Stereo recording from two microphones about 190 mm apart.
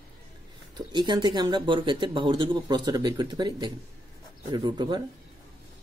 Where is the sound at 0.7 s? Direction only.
25° right (ahead or behind).